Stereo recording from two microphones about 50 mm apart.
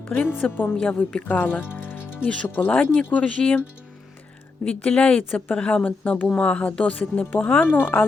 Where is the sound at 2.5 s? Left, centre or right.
Left.